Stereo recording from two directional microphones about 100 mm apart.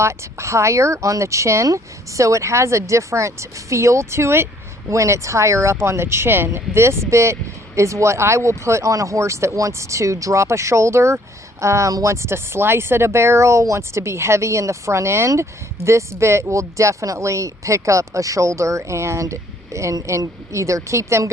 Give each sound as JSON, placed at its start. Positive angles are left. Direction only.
{"t": 0.0, "sound": "speech", "side_deg": -30}